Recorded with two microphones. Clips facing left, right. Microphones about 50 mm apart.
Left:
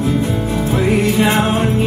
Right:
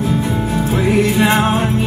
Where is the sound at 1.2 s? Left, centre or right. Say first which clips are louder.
Right 1 dB; centre.